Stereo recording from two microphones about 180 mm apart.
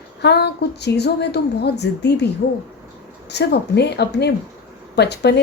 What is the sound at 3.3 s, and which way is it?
A woman's voice, 70° left (ahead or behind).